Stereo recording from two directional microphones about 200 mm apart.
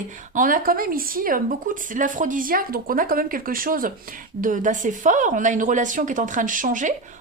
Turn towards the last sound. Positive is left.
turn(degrees=-40)  # may be behind; listen again after turning